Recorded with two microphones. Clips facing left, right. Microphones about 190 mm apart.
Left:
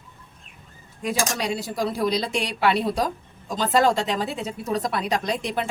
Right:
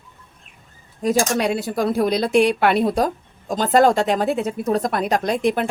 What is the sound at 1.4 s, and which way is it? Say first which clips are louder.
A woman's voice: right 6 dB; 55° right (ahead or behind).